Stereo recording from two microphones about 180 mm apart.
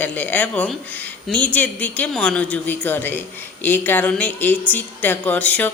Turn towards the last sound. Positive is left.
turn(degrees=10)  # may be behind; listen again after turning